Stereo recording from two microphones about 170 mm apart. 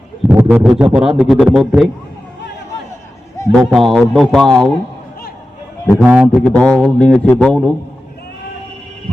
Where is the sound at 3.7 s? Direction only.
Centre (ahead or behind).